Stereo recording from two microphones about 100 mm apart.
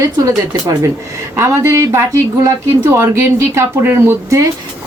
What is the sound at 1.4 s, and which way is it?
Speech, 30° right (ahead or behind).